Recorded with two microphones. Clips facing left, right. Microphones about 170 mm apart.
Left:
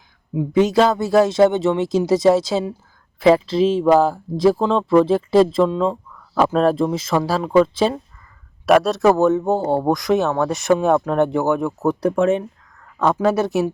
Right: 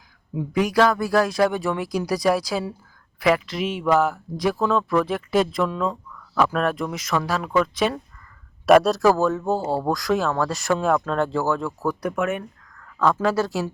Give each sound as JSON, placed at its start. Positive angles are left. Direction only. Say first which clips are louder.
{"t": 0.3, "sound": "speech", "louder": "left 5 dB", "side_deg": 25}
{"t": 8.6, "sound": "speech", "louder": "even", "side_deg": 0}
{"t": 9.0, "sound": "speech", "louder": "left 4 dB", "side_deg": 20}